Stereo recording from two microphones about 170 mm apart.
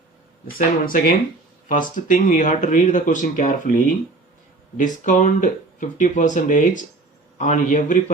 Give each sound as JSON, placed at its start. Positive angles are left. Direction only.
{"t": 0.9, "sound": "speech", "side_deg": 55}